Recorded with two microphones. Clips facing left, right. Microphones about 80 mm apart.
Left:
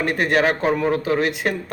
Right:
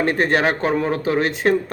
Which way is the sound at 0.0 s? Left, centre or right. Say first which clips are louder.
Right 1 dB; right.